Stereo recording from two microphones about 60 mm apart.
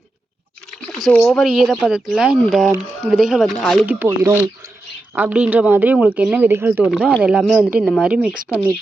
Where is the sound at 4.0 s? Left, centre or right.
Right.